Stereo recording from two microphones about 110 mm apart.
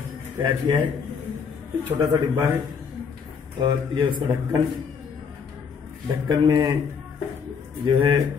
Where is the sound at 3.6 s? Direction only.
45° right (ahead or behind).